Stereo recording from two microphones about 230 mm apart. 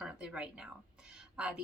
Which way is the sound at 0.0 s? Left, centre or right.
Centre.